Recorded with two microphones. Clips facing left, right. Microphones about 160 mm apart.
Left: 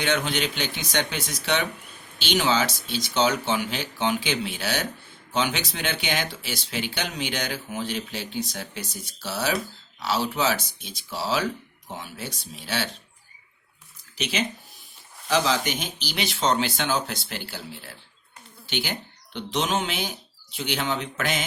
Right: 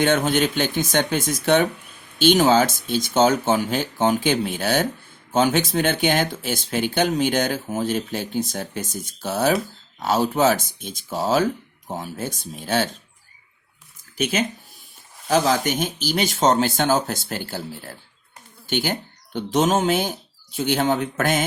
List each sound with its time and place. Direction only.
0.0 s speech: 50° right (ahead or behind)
14.2 s speech: 50° right (ahead or behind)